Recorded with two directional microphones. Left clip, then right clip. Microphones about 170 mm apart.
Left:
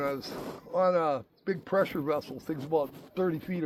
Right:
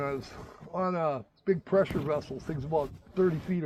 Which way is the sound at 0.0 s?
45° right (ahead or behind).